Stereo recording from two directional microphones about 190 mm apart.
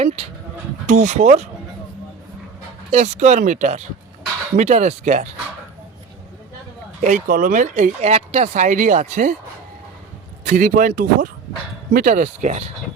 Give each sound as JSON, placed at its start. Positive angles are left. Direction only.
{"t": 0.0, "sound": "speech", "side_deg": -35}
{"t": 2.9, "sound": "speech", "side_deg": -35}
{"t": 7.0, "sound": "speech", "side_deg": -45}
{"t": 10.5, "sound": "speech", "side_deg": -45}